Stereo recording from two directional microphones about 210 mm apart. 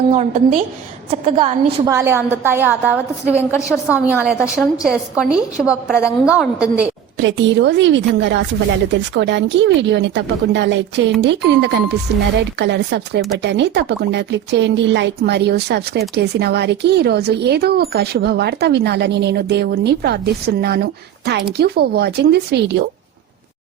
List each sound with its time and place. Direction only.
0.1 s a woman's voice: 35° right (ahead or behind)
1.9 s a woman's voice: 10° right (ahead or behind)
3.5 s a woman's voice: 15° left (ahead or behind)
4.0 s a woman's voice: 5° right (ahead or behind)
7.2 s speech: 60° right (ahead or behind)